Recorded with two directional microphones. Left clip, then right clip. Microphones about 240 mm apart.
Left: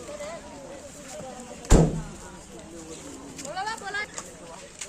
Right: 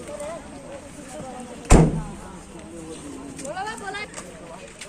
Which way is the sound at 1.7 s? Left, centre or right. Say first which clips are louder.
Right 4 dB; right.